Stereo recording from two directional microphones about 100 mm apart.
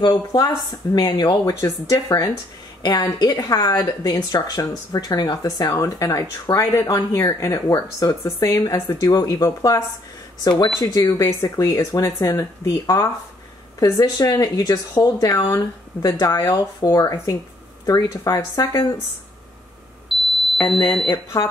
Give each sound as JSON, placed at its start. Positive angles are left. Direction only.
{"t": 0.0, "sound": "a woman's voice", "side_deg": 45}
{"t": 6.6, "sound": "speech", "side_deg": 25}
{"t": 9.1, "sound": "a woman's voice", "side_deg": 40}
{"t": 12.0, "sound": "speech", "side_deg": 30}
{"t": 12.6, "sound": "a woman's voice", "side_deg": 40}
{"t": 20.1, "sound": "music", "side_deg": 0}
{"t": 20.6, "sound": "speech", "side_deg": 50}